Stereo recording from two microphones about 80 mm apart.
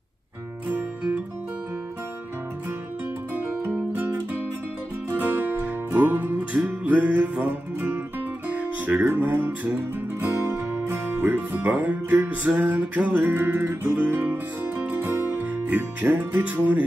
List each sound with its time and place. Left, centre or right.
0.7 s music: right
3.6 s music: right